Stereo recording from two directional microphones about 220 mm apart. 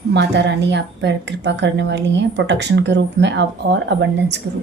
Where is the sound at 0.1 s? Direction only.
55° right (ahead or behind).